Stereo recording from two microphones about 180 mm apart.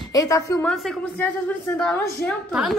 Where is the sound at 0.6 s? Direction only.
5° left (ahead or behind).